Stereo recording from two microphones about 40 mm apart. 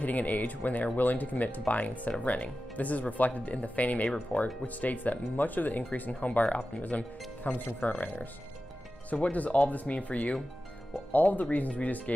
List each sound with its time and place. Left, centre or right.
0.0 s speech: left